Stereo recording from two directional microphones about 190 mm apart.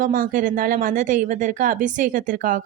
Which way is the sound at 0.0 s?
45° right (ahead or behind).